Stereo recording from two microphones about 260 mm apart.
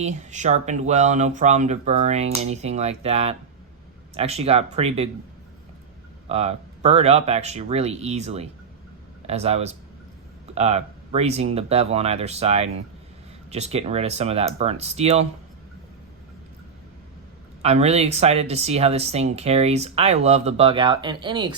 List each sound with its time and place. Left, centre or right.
0.0 s speech: right
6.2 s speech: right
17.6 s speech: right